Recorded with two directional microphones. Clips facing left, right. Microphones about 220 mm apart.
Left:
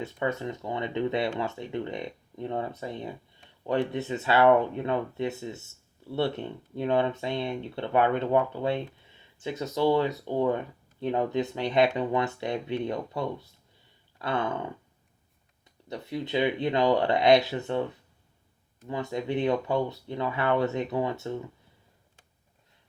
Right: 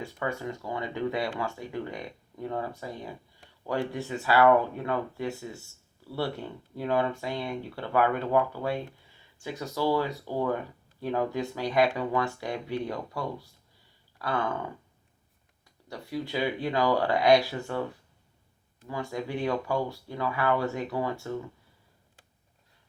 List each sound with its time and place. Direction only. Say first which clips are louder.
0.0 s speech: left 3 dB; 20° left (ahead or behind)
15.9 s speech: left 2 dB; 20° left (ahead or behind)
18.9 s speech: left 3 dB; 20° left (ahead or behind)